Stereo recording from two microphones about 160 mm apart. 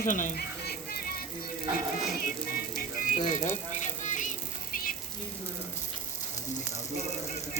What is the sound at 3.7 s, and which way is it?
Music, 50° left (ahead or behind).